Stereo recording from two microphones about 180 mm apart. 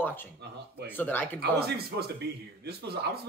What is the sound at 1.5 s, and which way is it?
Speech, 60° right (ahead or behind).